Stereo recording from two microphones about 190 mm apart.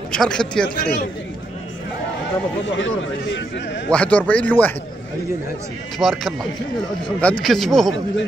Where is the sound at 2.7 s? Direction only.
75° left (ahead or behind).